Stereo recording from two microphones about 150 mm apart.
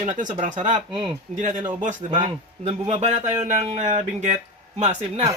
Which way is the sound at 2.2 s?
50° right (ahead or behind).